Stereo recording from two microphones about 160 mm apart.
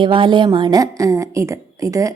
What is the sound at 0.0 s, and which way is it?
A woman's voice, 30° right (ahead or behind).